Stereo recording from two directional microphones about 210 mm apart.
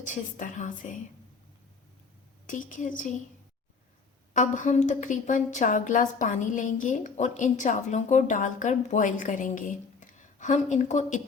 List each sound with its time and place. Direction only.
0.0 s a woman's voice: 35° left (ahead or behind)
2.5 s a woman's voice: 40° left (ahead or behind)
4.4 s a woman's voice: 35° left (ahead or behind)